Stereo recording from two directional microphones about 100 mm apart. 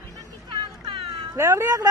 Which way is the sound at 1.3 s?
30° right (ahead or behind).